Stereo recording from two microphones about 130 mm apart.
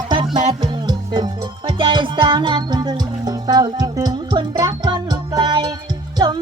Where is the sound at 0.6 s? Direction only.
35° right (ahead or behind).